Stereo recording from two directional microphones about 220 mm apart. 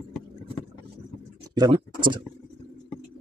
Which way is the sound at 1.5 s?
20° right (ahead or behind).